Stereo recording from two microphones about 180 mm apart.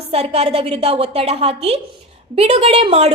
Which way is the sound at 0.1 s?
35° right (ahead or behind).